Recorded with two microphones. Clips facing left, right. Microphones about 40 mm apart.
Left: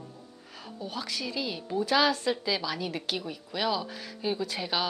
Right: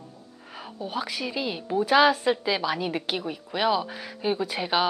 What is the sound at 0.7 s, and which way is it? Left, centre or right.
A woman's voice, centre.